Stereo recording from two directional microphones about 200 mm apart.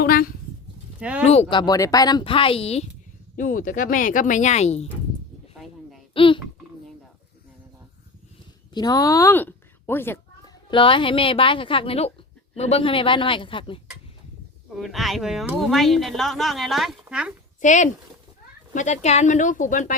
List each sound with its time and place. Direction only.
0.0 s a sound: 45° left (ahead or behind)
0.9 s a sound: 5° right (ahead or behind)
1.2 s speech: 30° left (ahead or behind)
3.3 s speech: 40° left (ahead or behind)
6.1 s speech: 25° left (ahead or behind)
8.7 s a woman's voice: 20° left (ahead or behind)
10.7 s speech: 25° left (ahead or behind)
14.8 s speech: centre (ahead or behind)
17.6 s speech: 40° left (ahead or behind)